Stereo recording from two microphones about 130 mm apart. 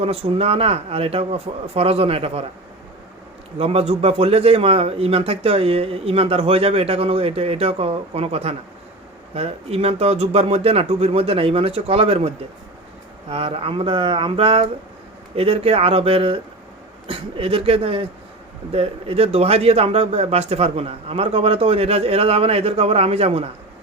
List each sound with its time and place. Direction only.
0.0 s speech: 50° right (ahead or behind)
3.6 s speech: 50° right (ahead or behind)
13.3 s speech: 45° right (ahead or behind)